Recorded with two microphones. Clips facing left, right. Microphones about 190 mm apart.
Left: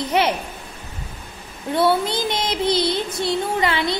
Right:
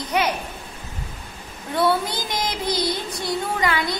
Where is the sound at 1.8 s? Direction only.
25° left (ahead or behind).